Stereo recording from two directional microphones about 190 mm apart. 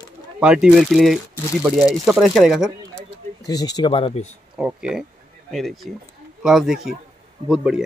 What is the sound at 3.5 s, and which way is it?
Speech, 20° left (ahead or behind).